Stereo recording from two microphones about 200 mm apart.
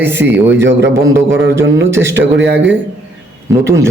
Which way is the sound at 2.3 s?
65° right (ahead or behind).